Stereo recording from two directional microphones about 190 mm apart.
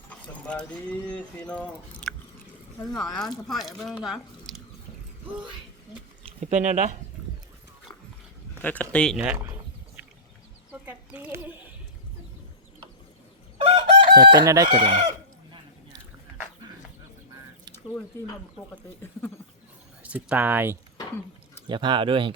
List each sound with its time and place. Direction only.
0.1 s speech: 5° left (ahead or behind)
3.2 s speech: centre (ahead or behind)
6.4 s speech: 40° right (ahead or behind)
8.6 s speech: 10° left (ahead or behind)
10.7 s chicken: 10° right (ahead or behind)
13.6 s chicken: 25° right (ahead or behind)
20.0 s speech: 5° right (ahead or behind)
21.7 s speech: 25° right (ahead or behind)